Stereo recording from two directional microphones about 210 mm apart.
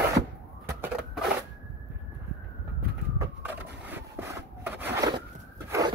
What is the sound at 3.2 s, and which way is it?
Wood, 10° right (ahead or behind).